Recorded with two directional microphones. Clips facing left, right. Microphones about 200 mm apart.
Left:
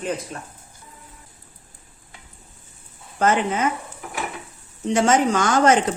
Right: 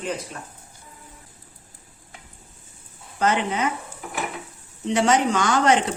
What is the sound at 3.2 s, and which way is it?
Speech, 50° left (ahead or behind).